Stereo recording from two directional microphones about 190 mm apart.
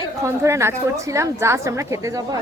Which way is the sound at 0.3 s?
15° right (ahead or behind).